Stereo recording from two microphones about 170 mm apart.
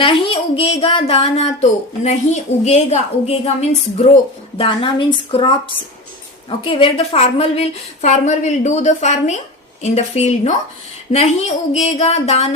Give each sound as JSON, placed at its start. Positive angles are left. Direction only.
{"t": 0.0, "sound": "a woman's voice", "side_deg": 30}